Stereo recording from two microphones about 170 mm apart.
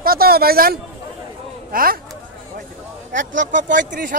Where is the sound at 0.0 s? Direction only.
60° right (ahead or behind).